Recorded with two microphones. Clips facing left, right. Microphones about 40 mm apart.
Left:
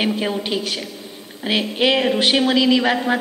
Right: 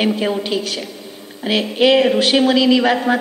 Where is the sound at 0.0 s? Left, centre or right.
Centre.